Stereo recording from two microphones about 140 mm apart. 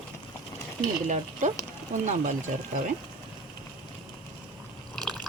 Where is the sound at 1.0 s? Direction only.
60° right (ahead or behind).